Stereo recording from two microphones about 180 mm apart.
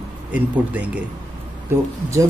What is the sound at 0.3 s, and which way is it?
Speech, 10° right (ahead or behind).